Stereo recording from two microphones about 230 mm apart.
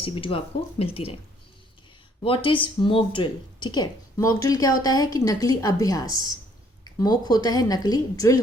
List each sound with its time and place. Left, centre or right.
0.0 s speech: left
2.2 s speech: left